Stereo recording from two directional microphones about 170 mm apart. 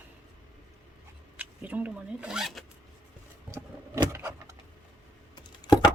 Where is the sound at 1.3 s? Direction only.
10° right (ahead or behind).